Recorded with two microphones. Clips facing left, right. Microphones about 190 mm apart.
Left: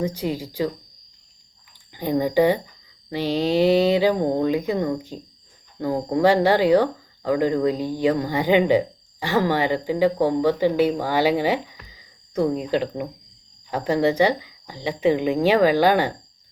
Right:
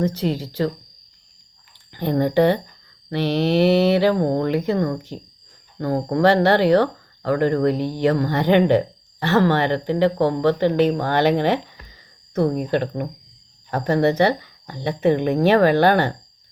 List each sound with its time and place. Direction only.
0.0 s speech: 10° left (ahead or behind)
1.9 s speech: 10° left (ahead or behind)